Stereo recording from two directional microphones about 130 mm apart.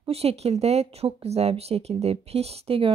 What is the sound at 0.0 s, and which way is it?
A woman's voice, 50° right (ahead or behind).